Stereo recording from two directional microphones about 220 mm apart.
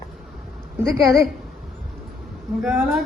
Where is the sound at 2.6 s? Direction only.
Centre (ahead or behind).